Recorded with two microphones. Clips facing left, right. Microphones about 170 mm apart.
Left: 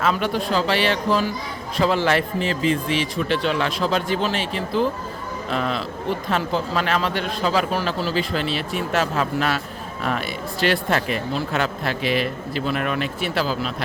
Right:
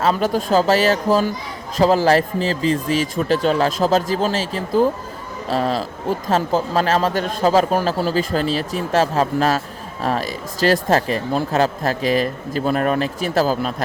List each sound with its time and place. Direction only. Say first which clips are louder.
0.0 s speech: right 3 dB; 40° right (ahead or behind)